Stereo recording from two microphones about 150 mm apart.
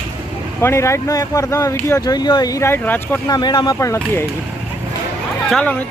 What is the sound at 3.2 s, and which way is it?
Speech, 25° left (ahead or behind).